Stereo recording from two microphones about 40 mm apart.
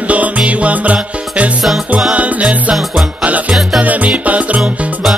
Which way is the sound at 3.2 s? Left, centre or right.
Right.